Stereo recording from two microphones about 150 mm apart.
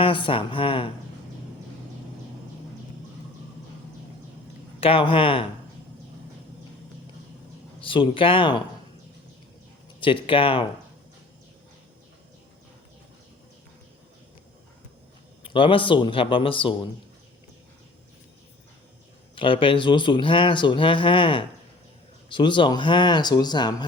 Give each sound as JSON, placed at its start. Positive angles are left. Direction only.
{"t": 0.0, "sound": "speech", "side_deg": 35}
{"t": 4.8, "sound": "speech", "side_deg": 40}
{"t": 7.8, "sound": "speech", "side_deg": 35}
{"t": 10.0, "sound": "speech", "side_deg": 35}
{"t": 15.4, "sound": "speech", "side_deg": 35}
{"t": 19.4, "sound": "speech", "side_deg": 35}